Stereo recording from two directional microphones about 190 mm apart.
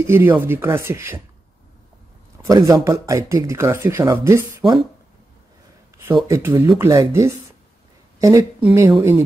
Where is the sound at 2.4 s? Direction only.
20° right (ahead or behind).